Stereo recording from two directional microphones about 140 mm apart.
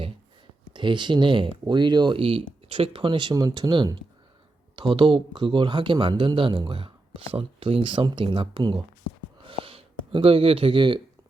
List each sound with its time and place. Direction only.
0.7 s speech: 35° right (ahead or behind)
4.9 s speech: 35° right (ahead or behind)